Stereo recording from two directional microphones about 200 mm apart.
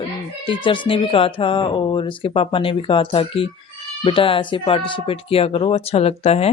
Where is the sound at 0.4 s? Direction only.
25° left (ahead or behind).